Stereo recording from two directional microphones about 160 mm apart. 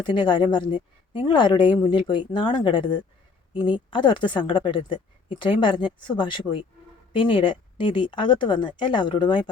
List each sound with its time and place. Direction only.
0.0 s a woman's voice: 30° left (ahead or behind)